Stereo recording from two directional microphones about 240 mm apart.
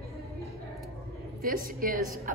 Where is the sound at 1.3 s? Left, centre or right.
Right.